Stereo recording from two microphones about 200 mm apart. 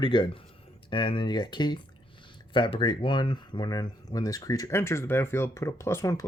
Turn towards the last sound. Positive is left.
turn(degrees=15)  # may be behind; listen again after turning